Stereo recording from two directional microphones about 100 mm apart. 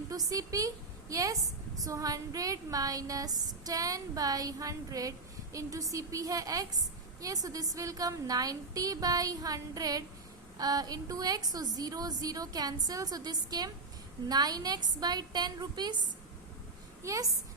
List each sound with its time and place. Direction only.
0.1 s a woman's voice: 35° right (ahead or behind)
17.0 s a woman's voice: 35° right (ahead or behind)